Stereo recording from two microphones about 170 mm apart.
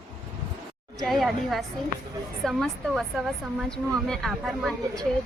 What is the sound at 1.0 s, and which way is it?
Speech, centre (ahead or behind).